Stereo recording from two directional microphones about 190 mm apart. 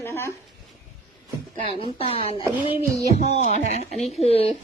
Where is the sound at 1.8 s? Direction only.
30° left (ahead or behind).